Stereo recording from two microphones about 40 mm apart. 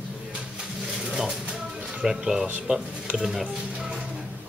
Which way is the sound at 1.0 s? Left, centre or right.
Centre.